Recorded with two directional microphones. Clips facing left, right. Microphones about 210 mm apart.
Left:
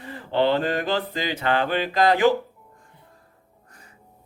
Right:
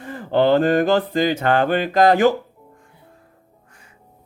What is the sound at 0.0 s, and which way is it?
Speech, 50° right (ahead or behind).